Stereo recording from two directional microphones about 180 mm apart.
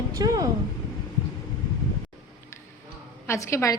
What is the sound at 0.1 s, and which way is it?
Speech, 20° right (ahead or behind).